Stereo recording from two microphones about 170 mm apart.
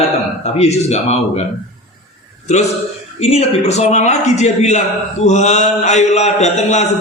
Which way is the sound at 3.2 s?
35° left (ahead or behind).